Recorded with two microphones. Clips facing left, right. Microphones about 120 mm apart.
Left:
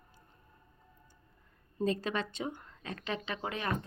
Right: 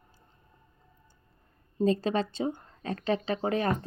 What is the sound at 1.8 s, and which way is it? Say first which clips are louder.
A woman's voice: right 6 dB; 30° right (ahead or behind).